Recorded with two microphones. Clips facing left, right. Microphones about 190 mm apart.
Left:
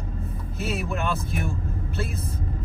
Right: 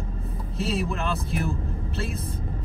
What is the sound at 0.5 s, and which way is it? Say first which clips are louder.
Speech: right 1 dB; 30° right (ahead or behind).